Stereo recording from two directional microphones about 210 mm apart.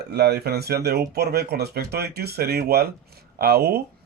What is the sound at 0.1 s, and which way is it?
Speech, 50° right (ahead or behind).